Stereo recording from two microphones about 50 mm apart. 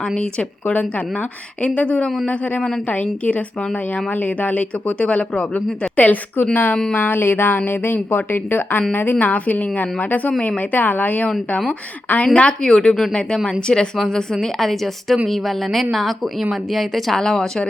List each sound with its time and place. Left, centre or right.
0.1 s speech: centre
0.7 s a woman's voice: left; by 17.7 s centre